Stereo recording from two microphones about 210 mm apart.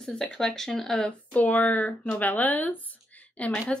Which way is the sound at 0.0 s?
5° left (ahead or behind).